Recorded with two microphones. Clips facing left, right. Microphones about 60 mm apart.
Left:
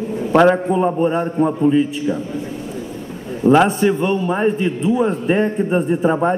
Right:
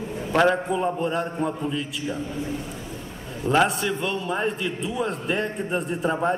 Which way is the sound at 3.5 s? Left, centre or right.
Left.